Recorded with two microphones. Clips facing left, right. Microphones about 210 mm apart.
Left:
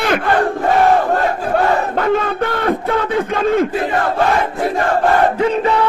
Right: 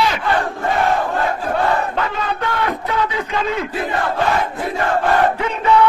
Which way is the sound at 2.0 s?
50° left (ahead or behind).